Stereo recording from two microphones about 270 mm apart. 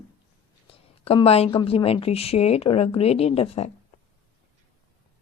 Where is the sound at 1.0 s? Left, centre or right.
Left.